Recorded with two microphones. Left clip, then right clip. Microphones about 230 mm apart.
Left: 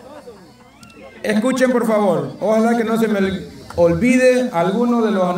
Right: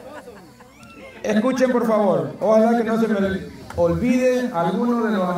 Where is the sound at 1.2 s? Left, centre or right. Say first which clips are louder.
Left 2 dB; centre.